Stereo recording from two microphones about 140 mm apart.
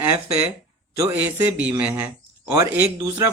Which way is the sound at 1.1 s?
10° right (ahead or behind).